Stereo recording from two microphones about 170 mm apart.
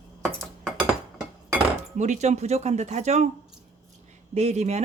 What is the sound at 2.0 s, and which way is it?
Speech, 45° right (ahead or behind).